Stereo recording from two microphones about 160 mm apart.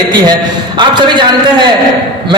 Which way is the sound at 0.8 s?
30° right (ahead or behind).